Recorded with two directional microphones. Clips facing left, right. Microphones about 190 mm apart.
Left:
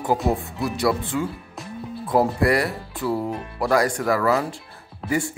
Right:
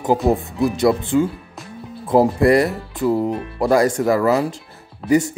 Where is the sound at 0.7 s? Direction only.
25° right (ahead or behind).